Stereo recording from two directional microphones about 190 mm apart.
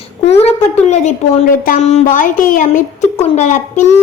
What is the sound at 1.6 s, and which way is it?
Speech, 40° left (ahead or behind).